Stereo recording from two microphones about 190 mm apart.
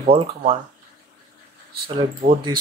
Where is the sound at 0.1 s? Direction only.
30° right (ahead or behind).